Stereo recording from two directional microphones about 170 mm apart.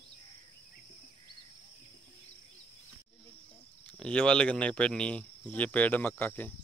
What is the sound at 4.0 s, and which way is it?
Speech, 5° left (ahead or behind).